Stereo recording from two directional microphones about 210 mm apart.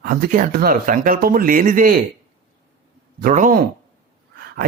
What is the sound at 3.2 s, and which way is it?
Speech, 40° right (ahead or behind).